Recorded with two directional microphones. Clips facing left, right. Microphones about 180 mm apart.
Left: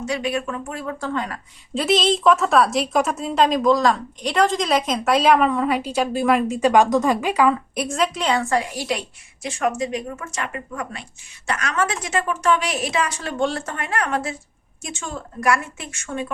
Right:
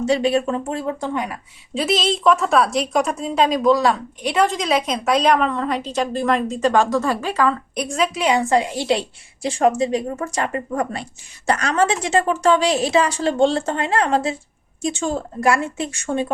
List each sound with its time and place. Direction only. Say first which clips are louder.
0.0 s a woman's voice: right 6 dB; 30° right (ahead or behind); by 1.4 s 15° right (ahead or behind)
1.7 s a woman's voice: left 1 dB; centre (ahead or behind)
7.8 s a woman's voice: right 1 dB; centre (ahead or behind); by 16.2 s 30° right (ahead or behind)